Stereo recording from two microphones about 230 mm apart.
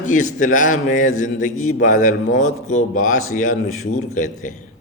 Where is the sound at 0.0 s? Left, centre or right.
Left.